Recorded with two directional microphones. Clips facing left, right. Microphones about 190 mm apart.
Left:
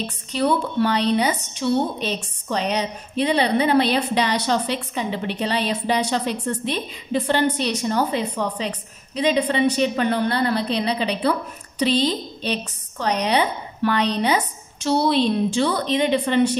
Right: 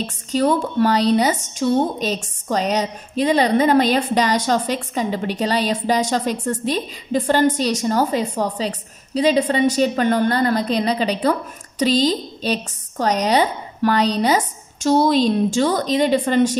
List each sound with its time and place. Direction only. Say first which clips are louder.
0.0 s a woman's voice: right 3 dB; 40° right (ahead or behind)